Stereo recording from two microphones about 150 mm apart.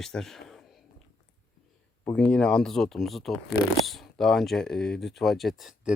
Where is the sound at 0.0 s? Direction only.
Centre (ahead or behind).